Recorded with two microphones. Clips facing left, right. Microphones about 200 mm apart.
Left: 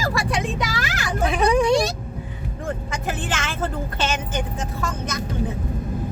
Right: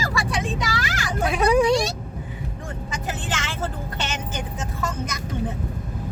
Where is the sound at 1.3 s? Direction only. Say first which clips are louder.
Right 1 dB; centre (ahead or behind).